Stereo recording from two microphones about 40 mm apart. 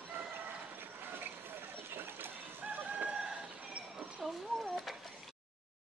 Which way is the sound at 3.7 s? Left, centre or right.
Right.